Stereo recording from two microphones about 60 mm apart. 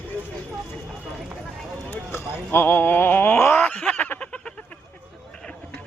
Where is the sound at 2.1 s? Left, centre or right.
Left.